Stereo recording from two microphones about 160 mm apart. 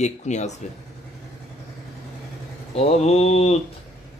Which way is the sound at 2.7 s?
40° left (ahead or behind).